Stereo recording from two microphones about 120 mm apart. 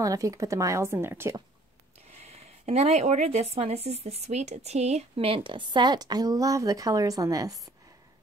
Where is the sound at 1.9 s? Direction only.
65° right (ahead or behind); by 7.6 s 30° right (ahead or behind).